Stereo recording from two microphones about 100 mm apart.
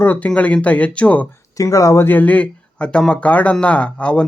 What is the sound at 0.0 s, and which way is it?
Speech, 20° left (ahead or behind).